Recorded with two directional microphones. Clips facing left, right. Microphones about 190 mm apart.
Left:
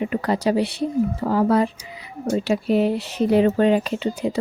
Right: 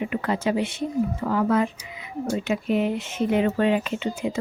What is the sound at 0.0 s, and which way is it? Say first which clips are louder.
Speech: left 3 dB; 35° left (ahead or behind).